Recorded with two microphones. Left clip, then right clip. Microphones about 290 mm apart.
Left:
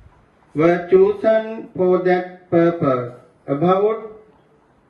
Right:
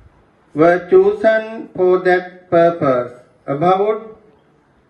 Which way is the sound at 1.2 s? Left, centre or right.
Right.